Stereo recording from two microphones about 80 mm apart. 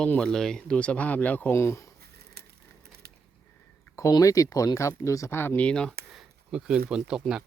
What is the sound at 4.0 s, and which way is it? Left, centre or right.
Speech, left.